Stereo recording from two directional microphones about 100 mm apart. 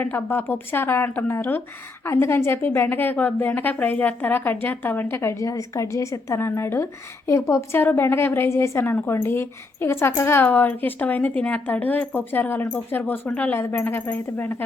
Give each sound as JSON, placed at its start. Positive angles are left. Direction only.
{"t": 0.0, "sound": "a woman's voice", "side_deg": 20}